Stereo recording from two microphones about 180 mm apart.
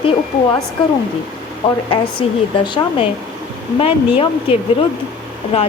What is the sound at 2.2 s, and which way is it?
Speech, 35° left (ahead or behind).